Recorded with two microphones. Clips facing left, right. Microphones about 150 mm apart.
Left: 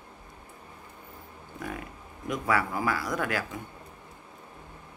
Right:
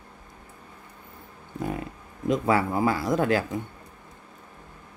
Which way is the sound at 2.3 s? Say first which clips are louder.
Right 5 dB; 25° right (ahead or behind).